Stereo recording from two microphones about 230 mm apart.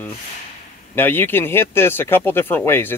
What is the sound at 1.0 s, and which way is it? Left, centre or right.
Speech, centre.